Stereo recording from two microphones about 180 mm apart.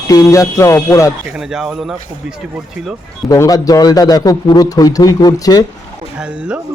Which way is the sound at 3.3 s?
20° left (ahead or behind).